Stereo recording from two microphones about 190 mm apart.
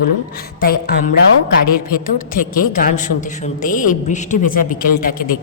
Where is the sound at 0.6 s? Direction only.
50° left (ahead or behind).